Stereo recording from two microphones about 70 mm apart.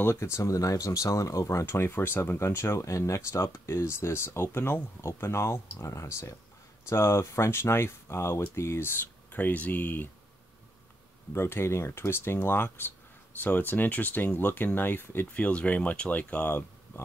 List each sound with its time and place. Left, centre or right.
0.0 s speech: left
11.3 s speech: left
15.3 s speech: centre